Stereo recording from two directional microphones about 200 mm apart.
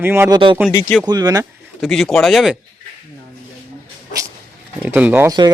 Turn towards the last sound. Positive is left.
turn(degrees=-10)  # may be behind; listen again after turning